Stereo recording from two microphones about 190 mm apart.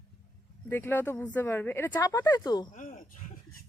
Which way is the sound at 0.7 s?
10° left (ahead or behind).